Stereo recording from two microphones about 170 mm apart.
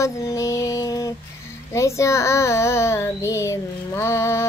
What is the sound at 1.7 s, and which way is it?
A child's voice, 15° left (ahead or behind).